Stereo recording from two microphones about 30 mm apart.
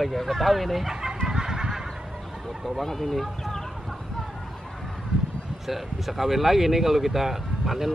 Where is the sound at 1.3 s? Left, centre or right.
Right.